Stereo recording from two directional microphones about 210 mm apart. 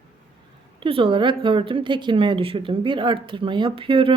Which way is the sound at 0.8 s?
25° right (ahead or behind).